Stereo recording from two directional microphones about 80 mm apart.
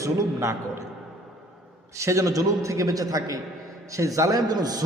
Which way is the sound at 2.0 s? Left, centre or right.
Right.